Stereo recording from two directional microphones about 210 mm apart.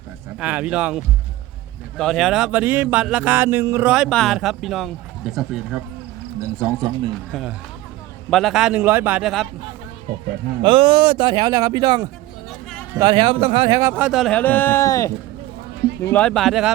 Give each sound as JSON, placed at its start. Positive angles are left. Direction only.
{"t": 0.3, "sound": "speech", "side_deg": -5}
{"t": 6.6, "sound": "a man's voice", "side_deg": -20}
{"t": 7.3, "sound": "speech", "side_deg": 0}
{"t": 10.6, "sound": "a man's voice", "side_deg": -25}
{"t": 12.5, "sound": "a sound", "side_deg": 0}
{"t": 13.0, "sound": "a man's voice", "side_deg": -25}
{"t": 13.9, "sound": "speech", "side_deg": -5}